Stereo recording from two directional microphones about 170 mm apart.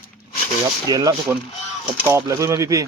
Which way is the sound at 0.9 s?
20° right (ahead or behind).